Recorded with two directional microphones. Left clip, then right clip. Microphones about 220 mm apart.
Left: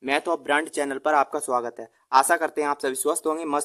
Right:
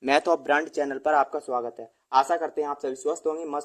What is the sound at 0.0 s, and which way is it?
A man's voice, 5° left (ahead or behind).